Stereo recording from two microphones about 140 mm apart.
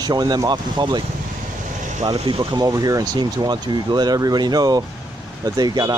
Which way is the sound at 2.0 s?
35° right (ahead or behind).